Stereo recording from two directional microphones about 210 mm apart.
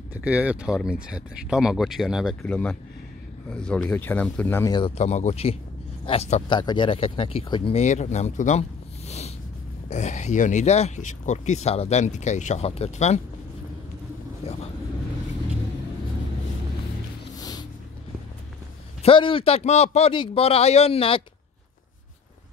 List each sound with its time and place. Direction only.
0.1 s speech: 5° right (ahead or behind); by 4.7 s 10° left (ahead or behind)
4.7 s speech: 30° left (ahead or behind)
14.4 s vehicle: 30° left (ahead or behind)
17.4 s a sound: 20° left (ahead or behind)
19.0 s speech: 25° left (ahead or behind)